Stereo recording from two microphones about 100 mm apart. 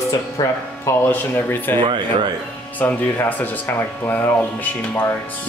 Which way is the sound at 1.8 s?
60° right (ahead or behind).